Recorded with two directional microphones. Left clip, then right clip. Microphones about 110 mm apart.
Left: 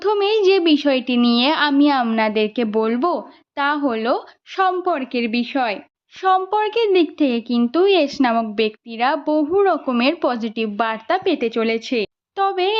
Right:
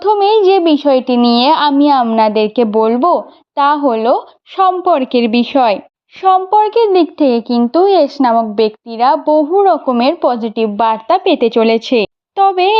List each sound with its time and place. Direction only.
0.0 s a woman's voice: 20° right (ahead or behind)
4.8 s a woman's voice: 45° right (ahead or behind)
5.1 s a woman's voice: 60° right (ahead or behind)
6.2 s a woman's voice: 25° right (ahead or behind)
11.3 s a woman's voice: 55° right (ahead or behind)
12.4 s speech: 40° right (ahead or behind)